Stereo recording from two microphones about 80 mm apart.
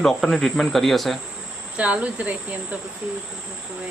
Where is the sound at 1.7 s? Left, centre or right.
Centre.